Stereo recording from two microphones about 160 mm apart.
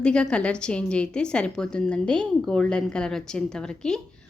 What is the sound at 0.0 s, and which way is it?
A woman's voice, 5° left (ahead or behind).